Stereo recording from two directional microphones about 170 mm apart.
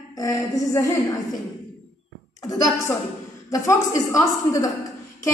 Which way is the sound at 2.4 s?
20° left (ahead or behind).